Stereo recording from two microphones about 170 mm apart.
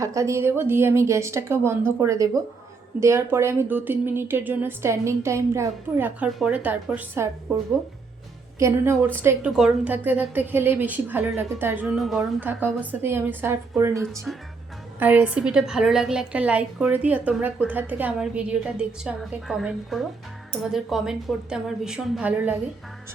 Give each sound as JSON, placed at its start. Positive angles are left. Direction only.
{"t": 0.0, "sound": "speech", "side_deg": -20}
{"t": 8.5, "sound": "a woman's voice", "side_deg": -15}
{"t": 14.3, "sound": "a woman's voice", "side_deg": 0}